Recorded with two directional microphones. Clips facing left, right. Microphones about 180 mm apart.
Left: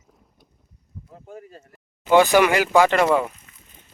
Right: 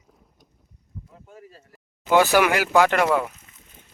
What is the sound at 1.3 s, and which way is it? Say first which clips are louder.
Speech: left 7 dB; 35° left (ahead or behind).